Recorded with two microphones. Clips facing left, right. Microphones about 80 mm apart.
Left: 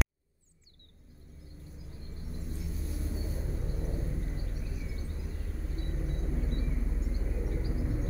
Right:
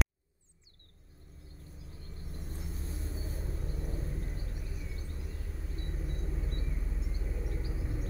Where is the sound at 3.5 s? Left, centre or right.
Centre.